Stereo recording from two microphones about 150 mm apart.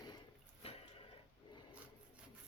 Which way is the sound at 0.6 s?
40° left (ahead or behind).